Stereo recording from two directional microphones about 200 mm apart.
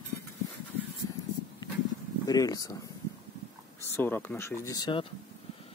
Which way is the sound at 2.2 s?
20° left (ahead or behind).